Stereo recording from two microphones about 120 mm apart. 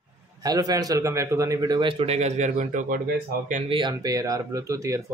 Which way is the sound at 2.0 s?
70° right (ahead or behind).